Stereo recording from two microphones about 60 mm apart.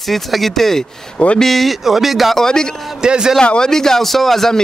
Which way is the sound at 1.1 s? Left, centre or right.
Left.